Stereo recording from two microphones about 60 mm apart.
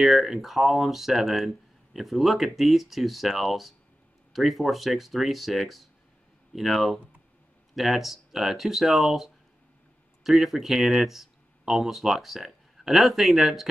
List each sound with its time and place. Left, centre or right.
0.0 s speech: centre